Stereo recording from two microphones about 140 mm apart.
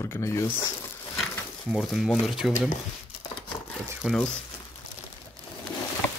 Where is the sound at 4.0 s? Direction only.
Centre (ahead or behind).